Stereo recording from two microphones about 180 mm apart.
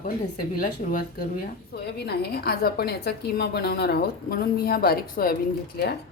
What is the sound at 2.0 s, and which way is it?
A woman's voice, 60° left (ahead or behind).